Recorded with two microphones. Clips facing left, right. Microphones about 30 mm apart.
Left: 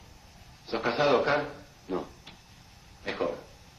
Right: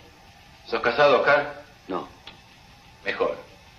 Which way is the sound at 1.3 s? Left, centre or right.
Right.